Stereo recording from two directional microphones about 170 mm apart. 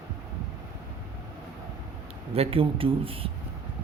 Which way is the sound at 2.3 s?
35° right (ahead or behind).